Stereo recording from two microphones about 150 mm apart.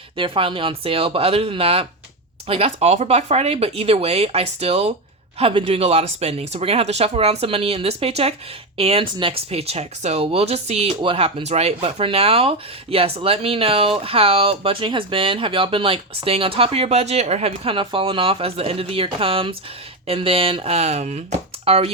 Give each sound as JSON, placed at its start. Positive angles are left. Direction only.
{"t": 0.2, "sound": "speech", "side_deg": -35}